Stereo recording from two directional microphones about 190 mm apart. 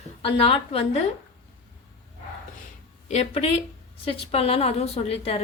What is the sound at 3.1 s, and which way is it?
A woman's voice, 35° left (ahead or behind).